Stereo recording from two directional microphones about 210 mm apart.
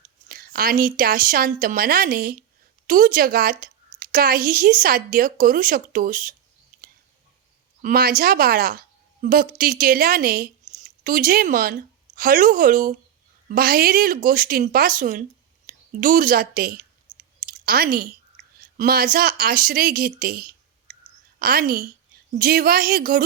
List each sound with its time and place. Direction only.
0.3 s a woman's voice: 45° right (ahead or behind)
7.8 s a woman's voice: 40° right (ahead or behind)
17.1 s clicking: 20° right (ahead or behind)
17.4 s a sound: 40° right (ahead or behind)
18.6 s a woman's voice: 45° right (ahead or behind)